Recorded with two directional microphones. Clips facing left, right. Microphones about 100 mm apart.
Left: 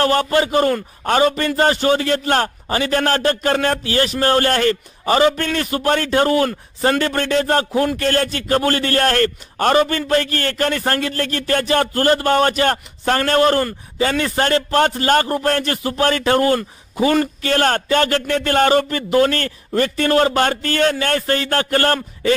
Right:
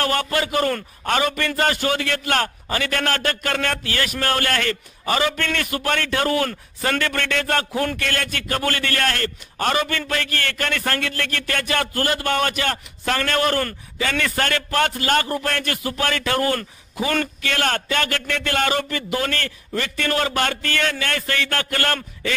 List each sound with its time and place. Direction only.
0.0 s a man's voice: 30° left (ahead or behind)